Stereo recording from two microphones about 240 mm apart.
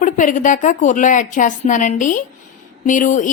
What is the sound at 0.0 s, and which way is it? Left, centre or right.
Speech, left.